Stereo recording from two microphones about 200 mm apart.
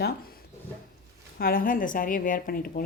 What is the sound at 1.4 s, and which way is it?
A woman's voice, 45° left (ahead or behind).